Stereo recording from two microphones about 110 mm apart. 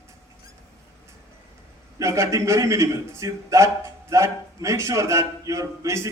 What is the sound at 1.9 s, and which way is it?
A man's voice, 25° right (ahead or behind).